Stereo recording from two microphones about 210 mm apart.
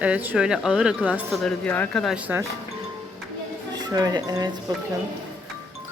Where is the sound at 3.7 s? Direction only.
20° right (ahead or behind).